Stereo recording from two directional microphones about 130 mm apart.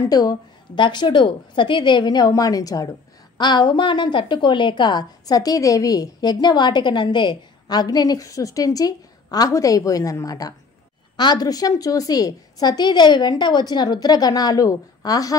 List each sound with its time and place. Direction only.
0.0 s a woman's voice: 30° left (ahead or behind)